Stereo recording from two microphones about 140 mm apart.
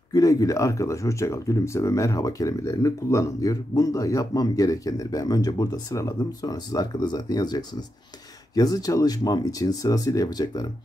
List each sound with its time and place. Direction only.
0.1 s speech: 25° left (ahead or behind)